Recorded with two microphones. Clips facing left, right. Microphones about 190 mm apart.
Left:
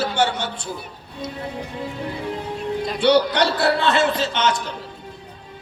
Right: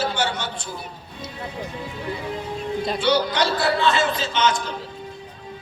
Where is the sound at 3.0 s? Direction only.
65° left (ahead or behind).